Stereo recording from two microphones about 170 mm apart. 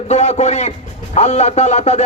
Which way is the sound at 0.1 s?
40° left (ahead or behind).